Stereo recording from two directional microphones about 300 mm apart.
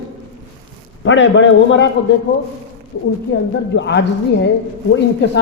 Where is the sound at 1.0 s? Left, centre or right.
Left.